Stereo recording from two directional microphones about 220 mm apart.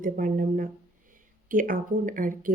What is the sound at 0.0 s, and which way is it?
A woman's voice, 40° right (ahead or behind).